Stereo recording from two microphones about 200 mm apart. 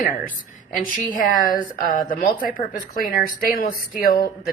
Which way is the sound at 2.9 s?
45° left (ahead or behind).